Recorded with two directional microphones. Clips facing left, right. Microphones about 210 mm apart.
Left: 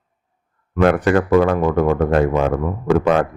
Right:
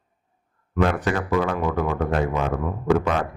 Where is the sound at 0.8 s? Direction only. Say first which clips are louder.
Left 7 dB; 60° left (ahead or behind).